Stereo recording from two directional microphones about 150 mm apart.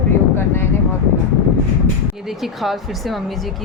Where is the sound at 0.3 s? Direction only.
15° left (ahead or behind).